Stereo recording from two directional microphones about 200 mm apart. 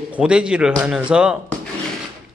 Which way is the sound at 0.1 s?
5° right (ahead or behind).